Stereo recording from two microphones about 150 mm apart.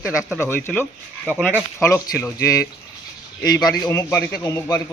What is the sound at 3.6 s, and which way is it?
Speech, 25° left (ahead or behind).